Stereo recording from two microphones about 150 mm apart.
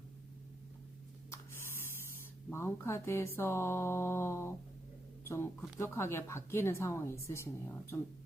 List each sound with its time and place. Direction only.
1.3 s speech: 15° left (ahead or behind)
5.2 s a sound: 15° left (ahead or behind)
5.8 s a woman's voice: 15° left (ahead or behind)